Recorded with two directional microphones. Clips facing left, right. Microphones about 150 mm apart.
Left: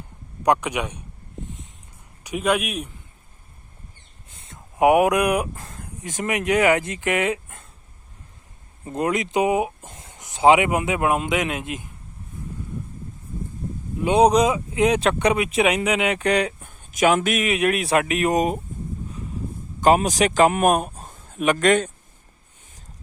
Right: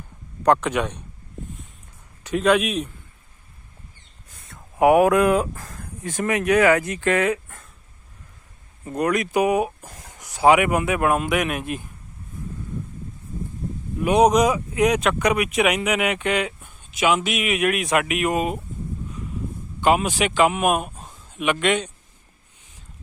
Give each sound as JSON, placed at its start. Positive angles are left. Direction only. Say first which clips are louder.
{"t": 0.4, "sound": "a man's voice", "louder": "right 2 dB", "side_deg": 15}
{"t": 2.2, "sound": "a man's voice", "louder": "right 3 dB", "side_deg": 10}
{"t": 4.3, "sound": "speech", "louder": "even", "side_deg": 25}
{"t": 8.8, "sound": "speech", "louder": "right 1 dB", "side_deg": 25}
{"t": 14.0, "sound": "speech", "louder": "even", "side_deg": 25}
{"t": 17.5, "sound": "speech", "louder": "even", "side_deg": 30}
{"t": 19.8, "sound": "speech", "louder": "left 2 dB", "side_deg": 40}
{"t": 21.1, "sound": "a man's voice", "louder": "left 2 dB", "side_deg": 50}